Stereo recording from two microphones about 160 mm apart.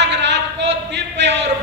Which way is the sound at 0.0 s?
90° right.